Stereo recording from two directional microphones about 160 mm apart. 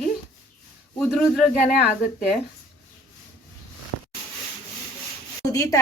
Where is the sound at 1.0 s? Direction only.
5° right (ahead or behind).